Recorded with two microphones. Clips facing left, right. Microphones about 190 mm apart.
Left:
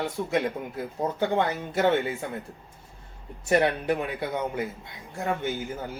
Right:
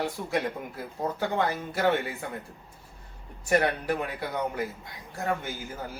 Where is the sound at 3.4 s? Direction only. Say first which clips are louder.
Left 2 dB; 20° left (ahead or behind).